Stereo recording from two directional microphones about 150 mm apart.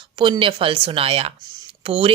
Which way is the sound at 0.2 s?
35° right (ahead or behind).